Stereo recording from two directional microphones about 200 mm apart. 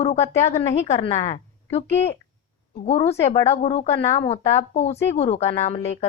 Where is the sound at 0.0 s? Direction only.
35° left (ahead or behind).